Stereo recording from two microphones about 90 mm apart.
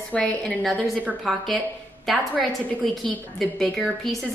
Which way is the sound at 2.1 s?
Centre (ahead or behind).